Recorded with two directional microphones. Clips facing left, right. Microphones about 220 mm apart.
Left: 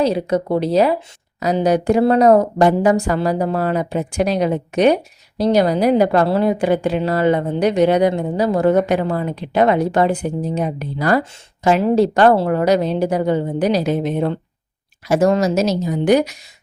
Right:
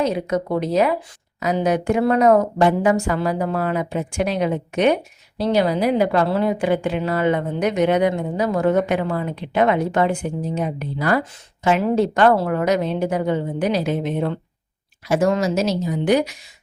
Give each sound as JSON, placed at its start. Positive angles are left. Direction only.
{"t": 0.0, "sound": "a woman's voice", "side_deg": 30}